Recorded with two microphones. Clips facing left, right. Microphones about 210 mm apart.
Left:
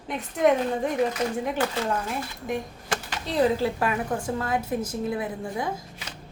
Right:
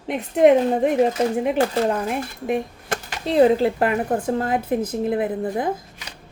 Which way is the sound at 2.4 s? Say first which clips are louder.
Right 9 dB; 60° right (ahead or behind).